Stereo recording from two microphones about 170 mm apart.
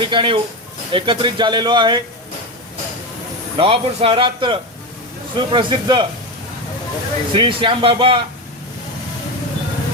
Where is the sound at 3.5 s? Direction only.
30° right (ahead or behind).